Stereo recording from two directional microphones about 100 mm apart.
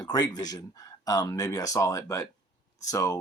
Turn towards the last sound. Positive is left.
turn(degrees=35)  # may be behind; listen again after turning